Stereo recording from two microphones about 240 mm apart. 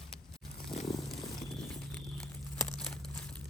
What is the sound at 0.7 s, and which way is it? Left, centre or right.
Wild animals, centre.